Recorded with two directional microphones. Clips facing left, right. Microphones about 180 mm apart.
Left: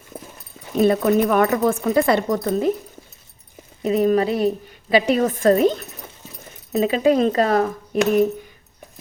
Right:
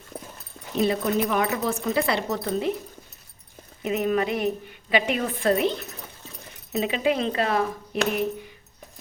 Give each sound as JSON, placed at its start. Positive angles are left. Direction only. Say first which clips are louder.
{"t": 0.8, "sound": "speech", "louder": "left 7 dB", "side_deg": 50}
{"t": 3.8, "sound": "a woman's voice", "louder": "left 6 dB", "side_deg": 35}